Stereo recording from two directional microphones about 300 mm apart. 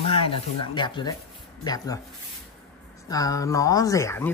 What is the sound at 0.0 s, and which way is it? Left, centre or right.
Speech, centre.